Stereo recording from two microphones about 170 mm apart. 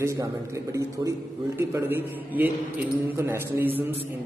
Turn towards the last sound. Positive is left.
turn(degrees=-10)  # may be behind; listen again after turning